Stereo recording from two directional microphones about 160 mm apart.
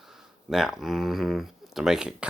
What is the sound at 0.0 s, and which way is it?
Speech, 5° right (ahead or behind).